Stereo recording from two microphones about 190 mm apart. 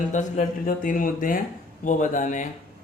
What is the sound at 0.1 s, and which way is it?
A man's voice, 40° left (ahead or behind).